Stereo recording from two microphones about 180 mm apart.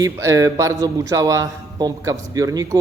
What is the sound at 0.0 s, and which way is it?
A man's voice, 15° right (ahead or behind).